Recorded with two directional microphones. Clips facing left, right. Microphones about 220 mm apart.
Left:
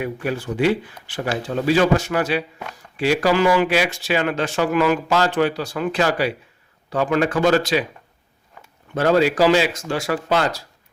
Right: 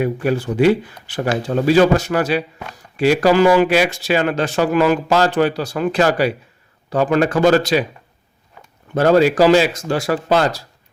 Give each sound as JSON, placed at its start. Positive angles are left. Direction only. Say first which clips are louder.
{"t": 0.0, "sound": "speech", "louder": "right 6 dB", "side_deg": -40}
{"t": 9.0, "sound": "speech", "louder": "right 4 dB", "side_deg": -40}